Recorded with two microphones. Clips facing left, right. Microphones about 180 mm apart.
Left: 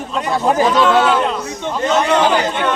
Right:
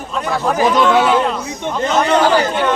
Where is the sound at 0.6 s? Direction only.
15° right (ahead or behind).